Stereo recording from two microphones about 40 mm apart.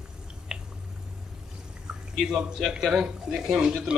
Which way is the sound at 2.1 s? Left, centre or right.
Centre.